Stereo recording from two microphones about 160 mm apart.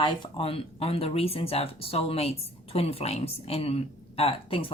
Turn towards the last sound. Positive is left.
turn(degrees=35)  # may be behind; listen again after turning